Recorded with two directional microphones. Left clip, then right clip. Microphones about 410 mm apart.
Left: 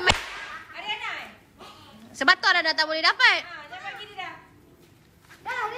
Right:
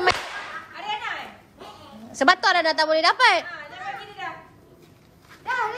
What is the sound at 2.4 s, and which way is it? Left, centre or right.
Speech, centre.